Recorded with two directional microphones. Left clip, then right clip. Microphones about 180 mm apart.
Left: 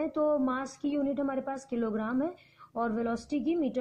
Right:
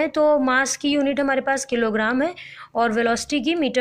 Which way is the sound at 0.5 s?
10° right (ahead or behind).